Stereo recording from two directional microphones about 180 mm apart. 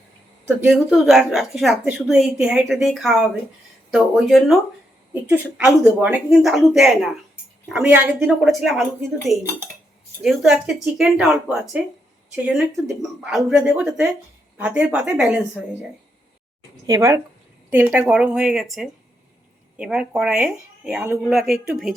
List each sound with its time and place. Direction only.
0.7 s a woman's voice: centre (ahead or behind)
16.8 s a woman's voice: 20° right (ahead or behind); by 21.9 s centre (ahead or behind)